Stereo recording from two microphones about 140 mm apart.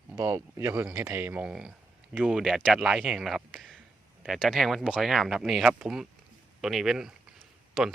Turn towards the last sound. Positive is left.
turn(degrees=0)  # may be behind; listen again after turning